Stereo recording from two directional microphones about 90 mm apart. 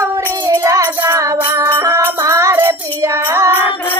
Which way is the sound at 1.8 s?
35° right (ahead or behind).